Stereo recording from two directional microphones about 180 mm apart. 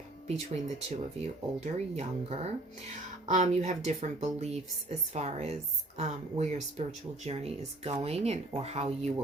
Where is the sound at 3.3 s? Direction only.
40° right (ahead or behind).